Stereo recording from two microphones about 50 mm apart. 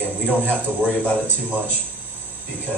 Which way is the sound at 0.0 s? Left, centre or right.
Centre.